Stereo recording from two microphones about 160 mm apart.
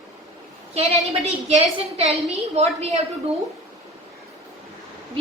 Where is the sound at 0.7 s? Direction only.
45° right (ahead or behind).